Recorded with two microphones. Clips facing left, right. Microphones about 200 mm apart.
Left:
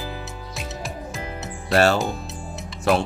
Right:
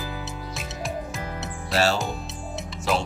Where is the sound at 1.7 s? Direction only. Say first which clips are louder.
Left 5 dB; 55° left (ahead or behind).